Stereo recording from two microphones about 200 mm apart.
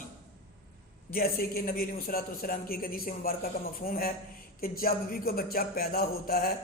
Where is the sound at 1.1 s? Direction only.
50° left (ahead or behind).